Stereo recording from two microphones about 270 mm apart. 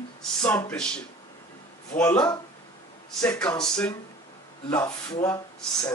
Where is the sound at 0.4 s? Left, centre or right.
Centre.